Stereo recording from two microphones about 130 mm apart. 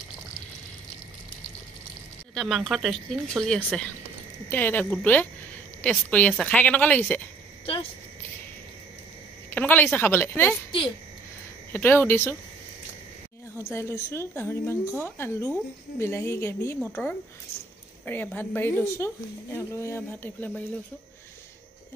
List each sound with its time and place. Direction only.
2.3 s a woman's voice: centre (ahead or behind)
9.5 s a woman's voice: 15° left (ahead or behind)
11.7 s a woman's voice: 15° left (ahead or behind)
13.6 s a woman's voice: 20° left (ahead or behind)